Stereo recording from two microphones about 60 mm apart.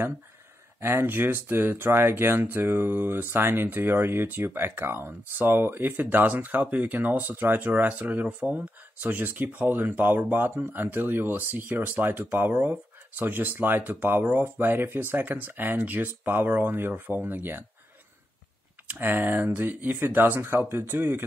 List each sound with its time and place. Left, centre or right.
0.7 s speech: right
18.9 s speech: right